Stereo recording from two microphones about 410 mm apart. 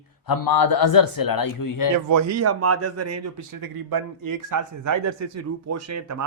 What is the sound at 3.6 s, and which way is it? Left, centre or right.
A man's voice, right.